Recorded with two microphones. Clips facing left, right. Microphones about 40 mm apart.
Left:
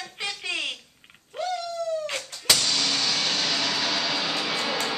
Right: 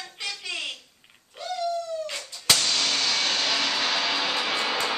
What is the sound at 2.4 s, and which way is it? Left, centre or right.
Vehicle, centre.